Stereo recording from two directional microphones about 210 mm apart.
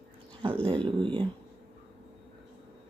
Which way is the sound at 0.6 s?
25° right (ahead or behind).